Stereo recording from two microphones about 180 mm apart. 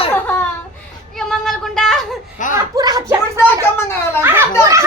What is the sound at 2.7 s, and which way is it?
Speech, 20° right (ahead or behind).